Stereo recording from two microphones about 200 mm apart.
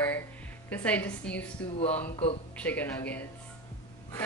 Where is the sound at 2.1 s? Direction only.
30° left (ahead or behind).